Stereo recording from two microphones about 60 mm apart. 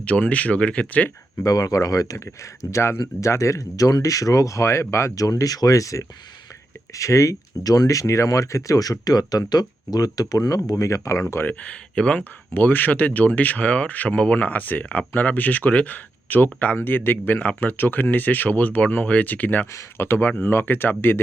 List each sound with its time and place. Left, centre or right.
0.0 s speech: left
1.5 s speech: left
5.1 s speech: left
10.7 s speech: left
11.6 s speech: centre
12.5 s speech: left
19.7 s speech: left